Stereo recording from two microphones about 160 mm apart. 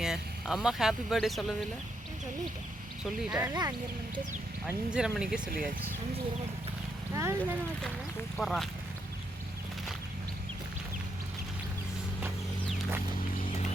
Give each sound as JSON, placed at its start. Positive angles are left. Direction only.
{"t": 0.0, "sound": "speech", "side_deg": -5}
{"t": 3.0, "sound": "speech", "side_deg": -5}
{"t": 3.5, "sound": "speech", "side_deg": -25}
{"t": 4.9, "sound": "speech", "side_deg": -5}
{"t": 5.5, "sound": "speech", "side_deg": -60}
{"t": 7.1, "sound": "speech", "side_deg": -15}
{"t": 8.4, "sound": "speech", "side_deg": 0}